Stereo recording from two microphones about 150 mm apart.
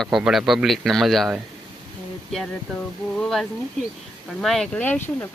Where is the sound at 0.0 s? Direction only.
5° right (ahead or behind).